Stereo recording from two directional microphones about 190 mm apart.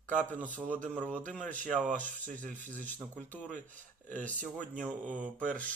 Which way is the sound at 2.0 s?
40° right (ahead or behind).